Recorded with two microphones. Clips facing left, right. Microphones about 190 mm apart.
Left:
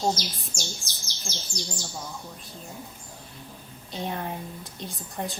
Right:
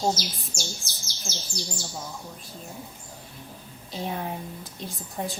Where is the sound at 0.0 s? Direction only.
5° right (ahead or behind).